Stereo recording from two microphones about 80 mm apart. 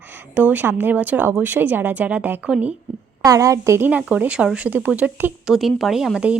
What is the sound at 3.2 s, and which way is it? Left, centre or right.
Speech, right.